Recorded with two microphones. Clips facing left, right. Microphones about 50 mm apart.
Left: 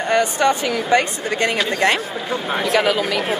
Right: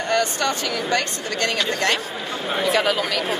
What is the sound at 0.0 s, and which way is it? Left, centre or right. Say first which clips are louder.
Speech: left 4 dB; left.